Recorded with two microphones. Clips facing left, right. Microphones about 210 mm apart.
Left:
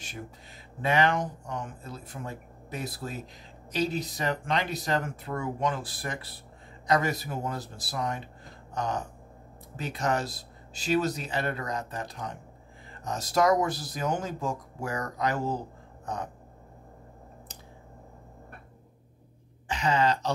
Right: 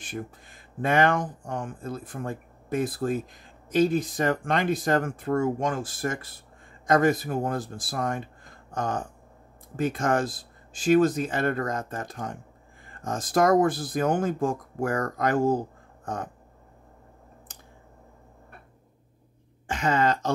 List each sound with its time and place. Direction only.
0.7 s speech: 50° right (ahead or behind)
19.7 s speech: 50° right (ahead or behind)